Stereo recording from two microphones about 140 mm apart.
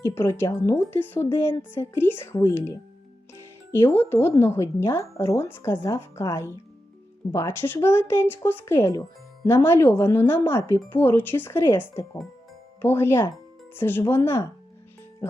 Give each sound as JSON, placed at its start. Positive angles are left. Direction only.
{"t": 0.1, "sound": "a woman's voice", "side_deg": 15}